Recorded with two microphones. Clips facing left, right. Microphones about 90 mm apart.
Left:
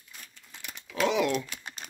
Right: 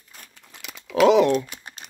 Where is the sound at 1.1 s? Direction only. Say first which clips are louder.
Right 9 dB; 45° right (ahead or behind).